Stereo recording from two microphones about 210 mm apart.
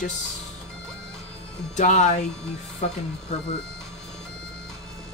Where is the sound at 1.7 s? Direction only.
35° left (ahead or behind).